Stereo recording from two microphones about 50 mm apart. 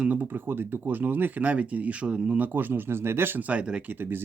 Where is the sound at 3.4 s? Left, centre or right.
Right.